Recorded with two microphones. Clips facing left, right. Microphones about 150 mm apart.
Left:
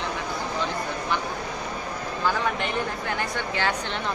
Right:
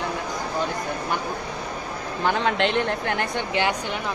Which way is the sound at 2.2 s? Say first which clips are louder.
Right 4 dB; 70° right (ahead or behind).